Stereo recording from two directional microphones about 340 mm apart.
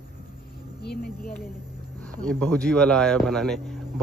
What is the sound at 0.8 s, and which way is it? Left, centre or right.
Speech, left.